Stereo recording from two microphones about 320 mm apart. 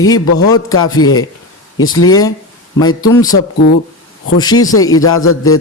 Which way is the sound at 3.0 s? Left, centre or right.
Centre.